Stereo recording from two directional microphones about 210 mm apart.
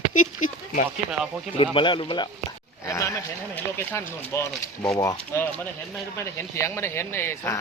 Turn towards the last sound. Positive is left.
turn(degrees=10)  # may be behind; listen again after turning